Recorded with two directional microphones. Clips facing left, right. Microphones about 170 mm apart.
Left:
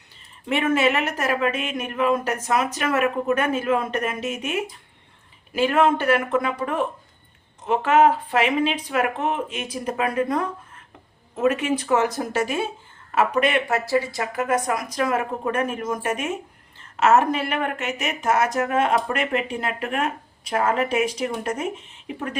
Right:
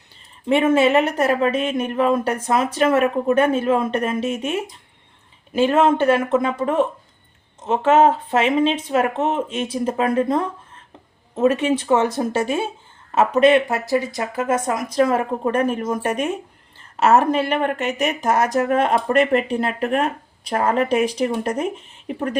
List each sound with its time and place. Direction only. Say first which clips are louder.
0.4 s speech: right 5 dB; 30° right (ahead or behind)